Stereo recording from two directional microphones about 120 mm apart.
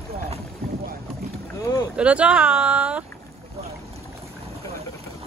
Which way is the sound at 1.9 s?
10° right (ahead or behind).